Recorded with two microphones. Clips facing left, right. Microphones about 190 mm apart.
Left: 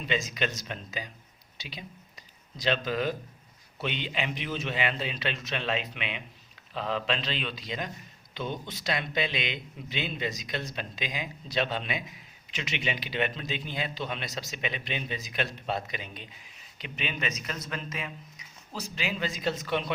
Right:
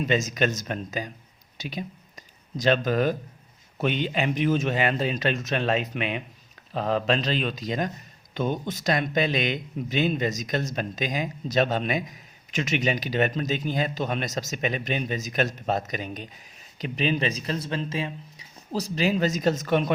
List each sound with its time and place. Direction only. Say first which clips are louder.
0.0 s a man's voice: right 7 dB; 45° right (ahead or behind)